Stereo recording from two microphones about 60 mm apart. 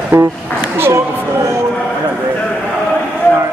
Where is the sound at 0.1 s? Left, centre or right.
Right.